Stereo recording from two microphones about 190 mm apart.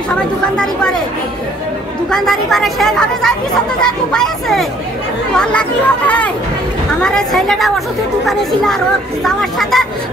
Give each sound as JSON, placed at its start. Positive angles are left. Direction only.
{"t": 2.0, "sound": "speech", "side_deg": 0}